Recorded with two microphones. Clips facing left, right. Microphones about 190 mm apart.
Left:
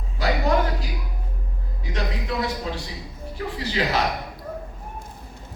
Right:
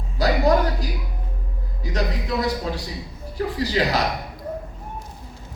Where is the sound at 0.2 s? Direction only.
40° right (ahead or behind).